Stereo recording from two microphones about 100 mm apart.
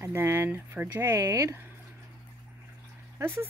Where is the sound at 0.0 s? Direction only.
25° right (ahead or behind).